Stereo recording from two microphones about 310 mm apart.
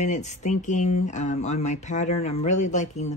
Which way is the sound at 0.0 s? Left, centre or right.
Left.